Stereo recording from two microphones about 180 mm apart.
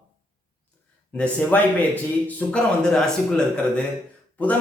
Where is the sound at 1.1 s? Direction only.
10° left (ahead or behind).